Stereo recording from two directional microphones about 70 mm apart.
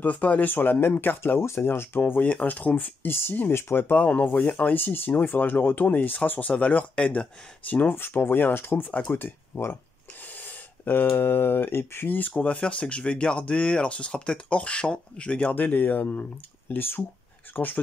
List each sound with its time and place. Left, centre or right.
0.0 s speech: centre
4.7 s speech: left
15.6 s speech: left